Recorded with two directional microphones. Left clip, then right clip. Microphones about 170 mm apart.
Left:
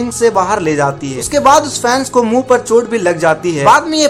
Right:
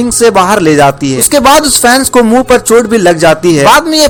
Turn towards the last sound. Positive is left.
turn(degrees=-40)  # may be behind; listen again after turning